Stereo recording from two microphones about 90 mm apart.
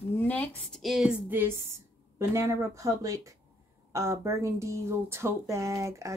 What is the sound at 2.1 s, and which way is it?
Speech, 35° right (ahead or behind).